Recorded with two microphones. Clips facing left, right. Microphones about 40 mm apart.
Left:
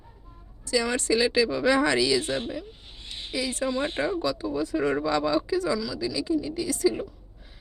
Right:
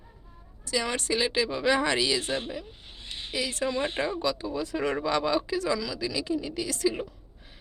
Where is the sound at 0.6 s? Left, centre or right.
Right.